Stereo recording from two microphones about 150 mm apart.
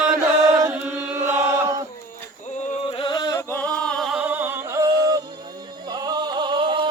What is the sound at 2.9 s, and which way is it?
Chant, 35° left (ahead or behind).